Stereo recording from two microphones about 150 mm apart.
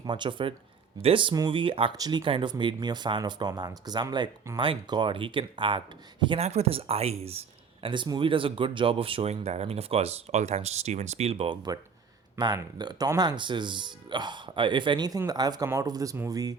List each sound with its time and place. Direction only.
0.0 s speech: 30° right (ahead or behind)
6.4 s speech: 45° right (ahead or behind); by 16.6 s 25° right (ahead or behind)